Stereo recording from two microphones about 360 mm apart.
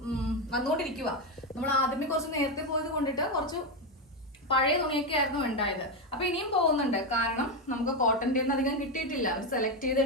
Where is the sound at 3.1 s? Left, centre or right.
Centre.